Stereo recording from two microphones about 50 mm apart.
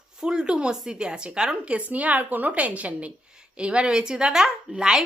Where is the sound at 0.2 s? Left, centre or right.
Centre.